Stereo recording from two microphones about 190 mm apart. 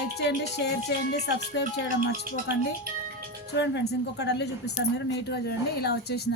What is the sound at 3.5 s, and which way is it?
Speech, 65° left (ahead or behind).